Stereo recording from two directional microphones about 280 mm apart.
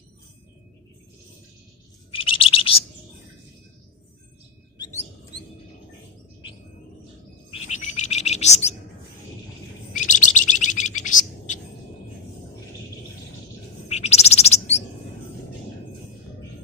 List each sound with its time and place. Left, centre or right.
2.1 s chirp: centre
7.5 s bird: left
9.9 s bird: left
13.8 s bird: left